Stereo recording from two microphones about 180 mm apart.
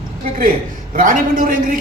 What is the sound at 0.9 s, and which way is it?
Speech, 50° right (ahead or behind).